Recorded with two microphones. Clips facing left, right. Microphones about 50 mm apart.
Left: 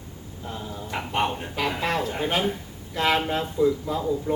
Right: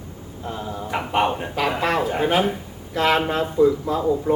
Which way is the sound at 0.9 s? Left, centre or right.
Centre.